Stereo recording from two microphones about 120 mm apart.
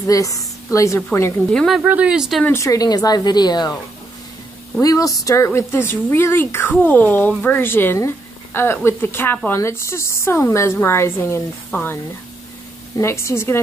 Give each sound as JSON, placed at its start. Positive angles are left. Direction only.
{"t": 0.0, "sound": "a woman's voice", "side_deg": 30}
{"t": 1.5, "sound": "speech", "side_deg": 5}
{"t": 1.8, "sound": "speech", "side_deg": -15}
{"t": 2.4, "sound": "speech", "side_deg": 25}
{"t": 4.8, "sound": "a woman's voice", "side_deg": 30}